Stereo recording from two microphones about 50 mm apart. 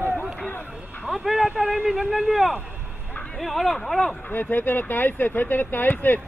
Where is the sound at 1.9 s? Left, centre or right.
Centre.